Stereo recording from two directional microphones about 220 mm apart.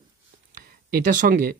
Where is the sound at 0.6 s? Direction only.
40° right (ahead or behind).